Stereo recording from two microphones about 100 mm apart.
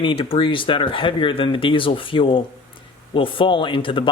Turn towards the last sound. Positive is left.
turn(degrees=60)  # may be behind; listen again after turning